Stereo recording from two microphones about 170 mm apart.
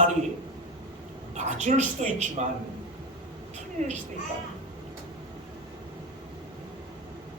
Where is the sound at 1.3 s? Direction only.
45° right (ahead or behind).